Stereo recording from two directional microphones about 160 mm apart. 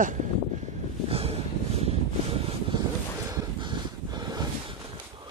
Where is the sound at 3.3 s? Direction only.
25° right (ahead or behind).